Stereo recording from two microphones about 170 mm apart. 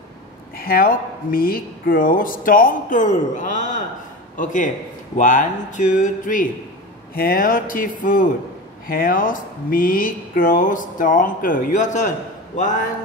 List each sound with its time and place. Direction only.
0.6 s speech: 60° left (ahead or behind)